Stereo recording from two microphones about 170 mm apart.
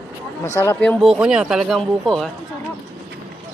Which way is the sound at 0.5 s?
15° left (ahead or behind).